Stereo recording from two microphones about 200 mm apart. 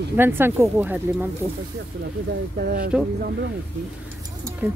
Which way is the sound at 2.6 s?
45° right (ahead or behind).